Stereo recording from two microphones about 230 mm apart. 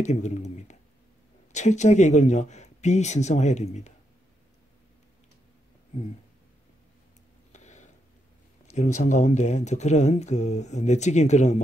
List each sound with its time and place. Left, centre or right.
0.0 s speech: left
7.5 s a sound: left
8.6 s speech: left